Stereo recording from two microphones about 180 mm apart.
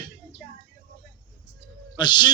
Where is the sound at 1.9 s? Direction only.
25° left (ahead or behind).